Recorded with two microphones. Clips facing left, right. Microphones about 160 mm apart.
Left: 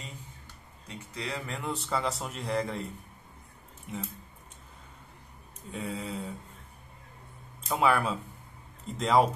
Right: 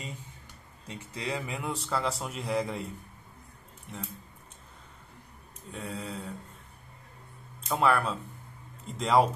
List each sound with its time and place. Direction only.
0.8 s a man's voice: 20° right (ahead or behind)
3.9 s speech: 5° left (ahead or behind)
5.7 s a man's voice: centre (ahead or behind)
7.6 s a man's voice: centre (ahead or behind)